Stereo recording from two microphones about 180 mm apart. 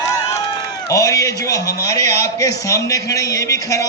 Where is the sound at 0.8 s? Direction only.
20° left (ahead or behind).